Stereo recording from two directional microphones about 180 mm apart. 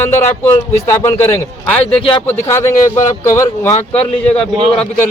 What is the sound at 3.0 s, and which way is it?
Speech, 15° left (ahead or behind).